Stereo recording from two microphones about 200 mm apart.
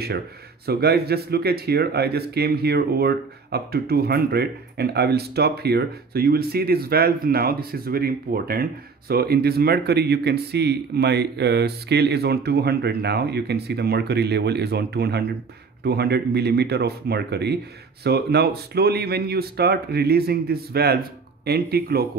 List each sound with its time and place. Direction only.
0.7 s speech: 50° right (ahead or behind)